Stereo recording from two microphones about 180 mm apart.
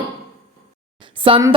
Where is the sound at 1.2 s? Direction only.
30° right (ahead or behind).